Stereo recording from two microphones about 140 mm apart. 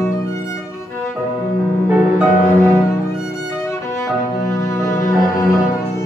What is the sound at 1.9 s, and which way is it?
Music, 10° right (ahead or behind).